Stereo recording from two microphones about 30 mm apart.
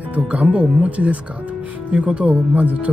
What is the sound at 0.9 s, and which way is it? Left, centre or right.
Speech, right.